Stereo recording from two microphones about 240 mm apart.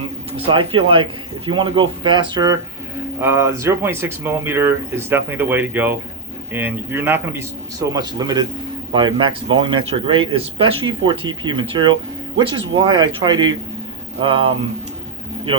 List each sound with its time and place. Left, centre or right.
0.3 s speech: right